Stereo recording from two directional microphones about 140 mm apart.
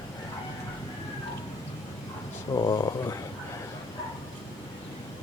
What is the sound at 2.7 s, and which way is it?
Speech, 20° left (ahead or behind).